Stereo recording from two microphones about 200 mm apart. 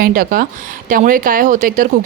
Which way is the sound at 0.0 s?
45° right (ahead or behind).